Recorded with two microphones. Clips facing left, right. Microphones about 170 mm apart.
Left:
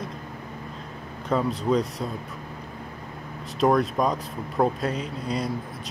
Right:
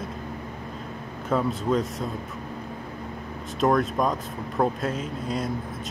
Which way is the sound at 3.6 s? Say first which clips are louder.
Left 1 dB; centre (ahead or behind).